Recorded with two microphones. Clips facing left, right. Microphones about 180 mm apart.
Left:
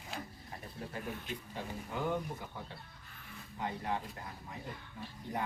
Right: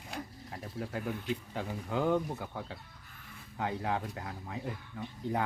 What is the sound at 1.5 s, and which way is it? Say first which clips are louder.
Speech: right 4 dB; 90° right.